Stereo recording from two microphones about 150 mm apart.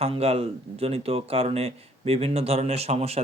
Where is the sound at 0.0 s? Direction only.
45° right (ahead or behind).